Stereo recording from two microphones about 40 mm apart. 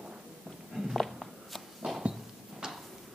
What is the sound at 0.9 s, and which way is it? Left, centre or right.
Walk, centre.